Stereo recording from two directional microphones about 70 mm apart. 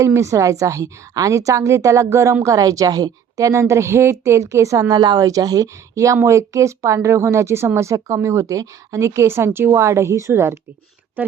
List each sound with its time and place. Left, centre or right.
0.0 s speech: right
2.4 s speech: right
4.9 s a woman's voice: right
11.2 s speech: right